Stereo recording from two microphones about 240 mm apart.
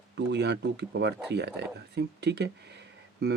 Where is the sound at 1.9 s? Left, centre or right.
Right.